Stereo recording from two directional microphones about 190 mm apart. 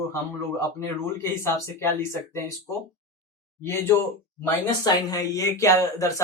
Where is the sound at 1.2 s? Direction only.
15° left (ahead or behind).